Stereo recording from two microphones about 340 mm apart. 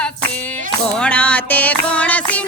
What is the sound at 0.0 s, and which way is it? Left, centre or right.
Clapping, centre.